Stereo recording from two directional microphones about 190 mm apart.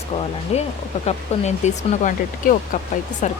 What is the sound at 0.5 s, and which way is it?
Speech, 35° left (ahead or behind).